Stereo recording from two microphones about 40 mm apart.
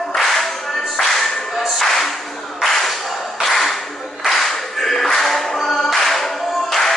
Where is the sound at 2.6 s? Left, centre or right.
Centre.